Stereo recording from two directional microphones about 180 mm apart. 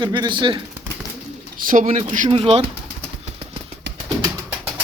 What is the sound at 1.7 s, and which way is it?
Speech, 45° right (ahead or behind).